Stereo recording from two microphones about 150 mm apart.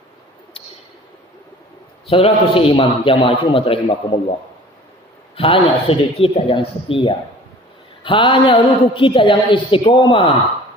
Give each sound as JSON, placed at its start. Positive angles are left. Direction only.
{"t": 2.0, "sound": "a woman's voice", "side_deg": 40}
{"t": 5.4, "sound": "a woman's voice", "side_deg": 40}